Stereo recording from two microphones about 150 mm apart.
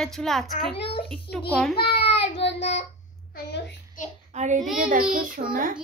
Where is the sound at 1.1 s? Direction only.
5° left (ahead or behind).